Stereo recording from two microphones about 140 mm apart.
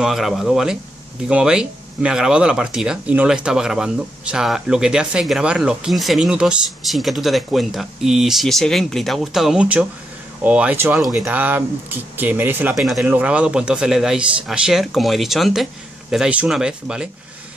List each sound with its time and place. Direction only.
0.0 s speech: 5° right (ahead or behind)
12.7 s speech: centre (ahead or behind)